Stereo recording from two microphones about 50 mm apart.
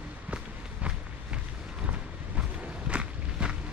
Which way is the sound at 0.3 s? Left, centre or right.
Right.